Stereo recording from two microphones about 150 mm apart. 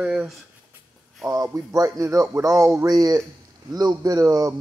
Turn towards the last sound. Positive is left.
turn(degrees=-25)  # may be behind; listen again after turning